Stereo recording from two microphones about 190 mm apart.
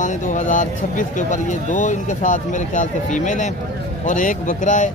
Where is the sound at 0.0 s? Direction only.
40° left (ahead or behind).